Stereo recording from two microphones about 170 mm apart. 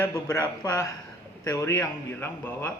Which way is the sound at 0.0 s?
15° left (ahead or behind).